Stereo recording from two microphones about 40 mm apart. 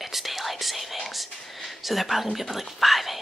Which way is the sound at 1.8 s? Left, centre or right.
Centre.